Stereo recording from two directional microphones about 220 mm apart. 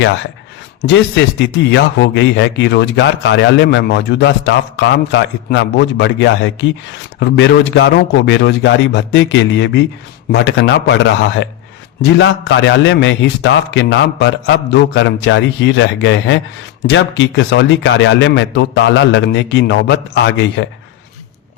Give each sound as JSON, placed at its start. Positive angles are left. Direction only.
{"t": 0.9, "sound": "a man's voice", "side_deg": 55}
{"t": 12.1, "sound": "speech", "side_deg": 55}